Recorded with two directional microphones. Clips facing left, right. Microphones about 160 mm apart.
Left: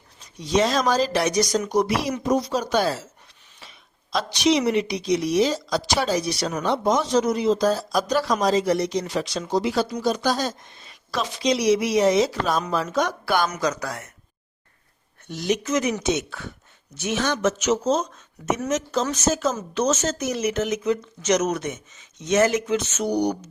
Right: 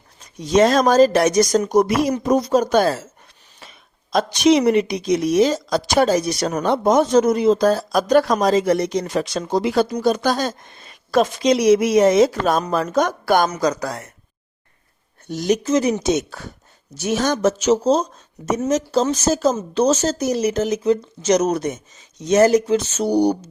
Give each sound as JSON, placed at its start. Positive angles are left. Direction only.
{"t": 0.2, "sound": "a woman's voice", "side_deg": -50}
{"t": 13.5, "sound": "speech", "side_deg": -35}
{"t": 15.3, "sound": "speech", "side_deg": -40}